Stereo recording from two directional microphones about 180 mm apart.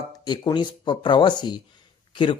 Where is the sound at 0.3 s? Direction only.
25° left (ahead or behind).